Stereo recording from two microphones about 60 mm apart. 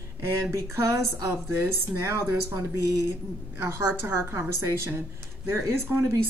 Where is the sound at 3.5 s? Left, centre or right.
Right.